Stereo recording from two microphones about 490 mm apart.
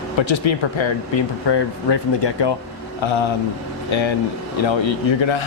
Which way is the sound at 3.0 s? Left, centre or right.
Left.